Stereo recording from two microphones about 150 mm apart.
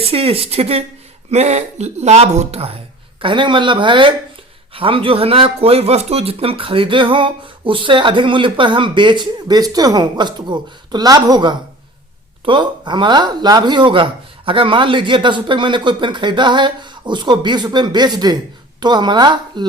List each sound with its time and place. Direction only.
0.0 s a woman's voice: 40° right (ahead or behind)